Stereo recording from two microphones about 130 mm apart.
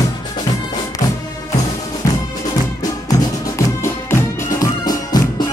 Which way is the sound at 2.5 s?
25° left (ahead or behind).